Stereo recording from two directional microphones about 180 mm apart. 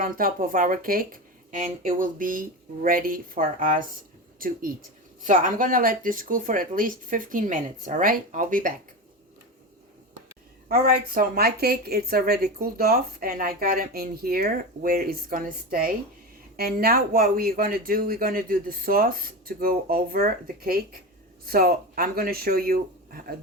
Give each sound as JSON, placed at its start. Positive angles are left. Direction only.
{"t": 0.0, "sound": "speech", "side_deg": -55}
{"t": 10.7, "sound": "a woman's voice", "side_deg": -60}